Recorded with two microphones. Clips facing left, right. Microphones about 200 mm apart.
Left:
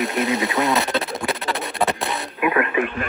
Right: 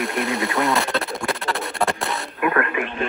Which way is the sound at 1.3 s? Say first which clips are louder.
Even; 20° left (ahead or behind).